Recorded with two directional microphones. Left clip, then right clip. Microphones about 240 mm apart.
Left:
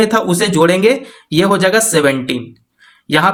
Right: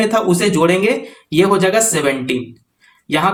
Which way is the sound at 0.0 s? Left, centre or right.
Left.